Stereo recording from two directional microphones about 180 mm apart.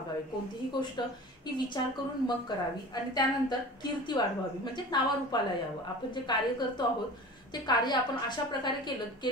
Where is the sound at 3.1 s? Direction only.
25° left (ahead or behind).